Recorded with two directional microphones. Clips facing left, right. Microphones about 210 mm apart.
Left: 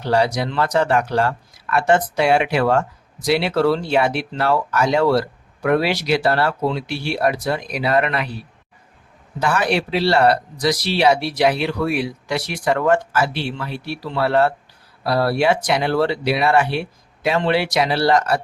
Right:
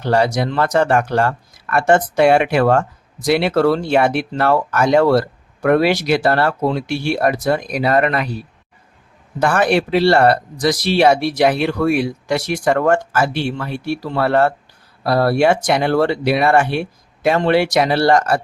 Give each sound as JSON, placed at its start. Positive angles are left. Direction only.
{"t": 0.0, "sound": "speech", "side_deg": -50}